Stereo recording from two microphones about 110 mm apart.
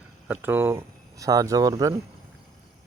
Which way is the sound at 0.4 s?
20° right (ahead or behind).